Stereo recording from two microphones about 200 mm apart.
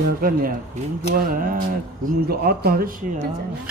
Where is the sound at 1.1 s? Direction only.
45° right (ahead or behind).